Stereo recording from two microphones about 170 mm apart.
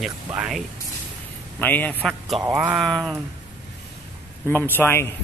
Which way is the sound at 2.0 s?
Centre (ahead or behind).